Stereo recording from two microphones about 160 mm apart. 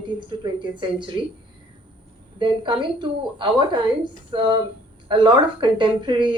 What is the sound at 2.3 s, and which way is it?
A woman's voice, 30° right (ahead or behind).